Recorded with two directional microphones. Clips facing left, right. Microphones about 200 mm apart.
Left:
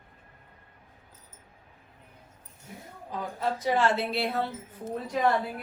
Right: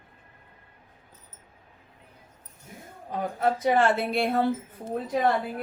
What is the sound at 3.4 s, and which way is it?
A woman's voice, 55° right (ahead or behind).